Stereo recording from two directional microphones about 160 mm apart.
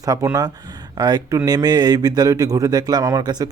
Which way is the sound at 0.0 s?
20° right (ahead or behind).